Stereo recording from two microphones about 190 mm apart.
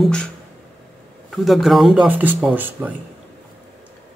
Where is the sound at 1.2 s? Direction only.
Centre (ahead or behind).